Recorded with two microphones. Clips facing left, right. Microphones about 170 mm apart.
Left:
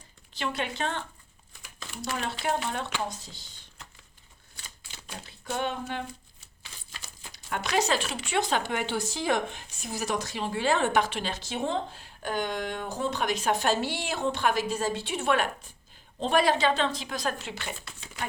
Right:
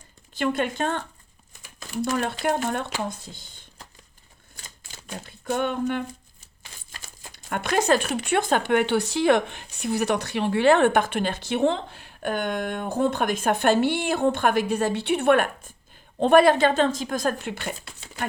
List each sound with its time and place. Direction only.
0.3 s speech: 50° right (ahead or behind)
4.5 s typewriter: 50° right (ahead or behind)
7.0 s speech: 50° right (ahead or behind)